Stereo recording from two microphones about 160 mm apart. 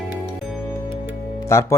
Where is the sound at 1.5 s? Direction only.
15° left (ahead or behind).